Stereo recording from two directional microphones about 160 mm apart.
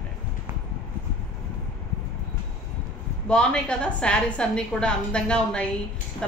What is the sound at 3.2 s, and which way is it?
Speech, 5° left (ahead or behind).